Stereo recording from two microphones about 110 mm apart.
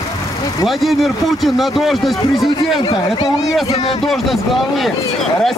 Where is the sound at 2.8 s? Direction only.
40° left (ahead or behind).